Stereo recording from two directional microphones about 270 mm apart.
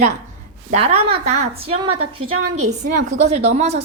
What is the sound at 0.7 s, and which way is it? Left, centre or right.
Speech, right.